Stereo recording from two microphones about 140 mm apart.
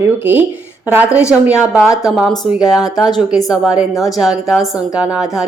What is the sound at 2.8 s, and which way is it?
Speech, 30° left (ahead or behind).